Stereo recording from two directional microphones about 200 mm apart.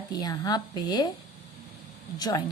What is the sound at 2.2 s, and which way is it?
Speech, 20° left (ahead or behind).